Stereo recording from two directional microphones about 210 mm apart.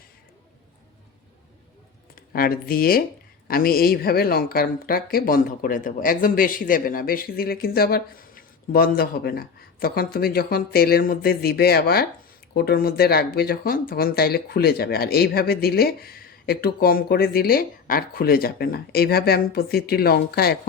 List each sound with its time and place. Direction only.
2.1 s speech: 45° left (ahead or behind)